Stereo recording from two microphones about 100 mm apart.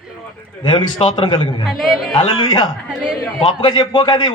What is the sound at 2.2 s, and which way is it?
A man's voice, 50° left (ahead or behind).